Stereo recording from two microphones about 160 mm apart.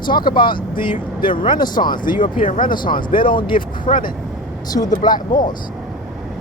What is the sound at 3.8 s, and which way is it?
Speech, 55° left (ahead or behind).